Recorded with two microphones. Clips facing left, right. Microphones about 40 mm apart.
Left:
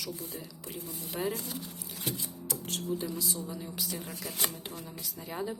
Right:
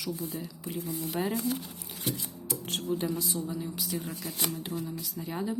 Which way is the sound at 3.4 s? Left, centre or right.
Centre.